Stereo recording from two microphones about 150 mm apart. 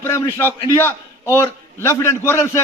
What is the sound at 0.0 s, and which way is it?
A man's voice, 15° left (ahead or behind).